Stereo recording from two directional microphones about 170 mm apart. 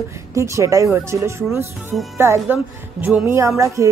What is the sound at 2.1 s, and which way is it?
Speech, 15° right (ahead or behind).